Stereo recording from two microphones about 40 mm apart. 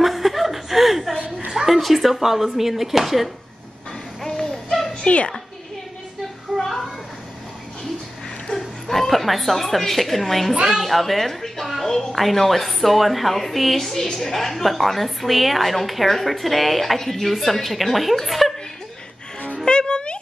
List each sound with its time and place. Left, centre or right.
0.0 s chuckle: centre
1.5 s speech: centre
4.2 s a sound: centre
5.0 s a child's voice: left
6.6 s children playing: centre
8.5 s a woman's voice: centre
11.6 s a sound: centre
11.9 s a woman's voice: centre
19.6 s music: centre